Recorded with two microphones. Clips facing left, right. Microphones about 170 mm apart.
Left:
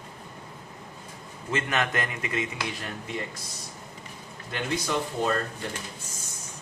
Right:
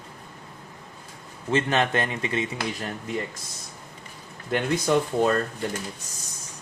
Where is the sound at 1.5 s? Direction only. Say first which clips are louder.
Right 5 dB; 30° right (ahead or behind).